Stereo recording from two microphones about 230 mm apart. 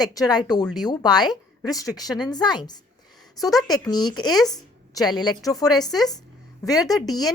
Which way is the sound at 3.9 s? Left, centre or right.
Centre.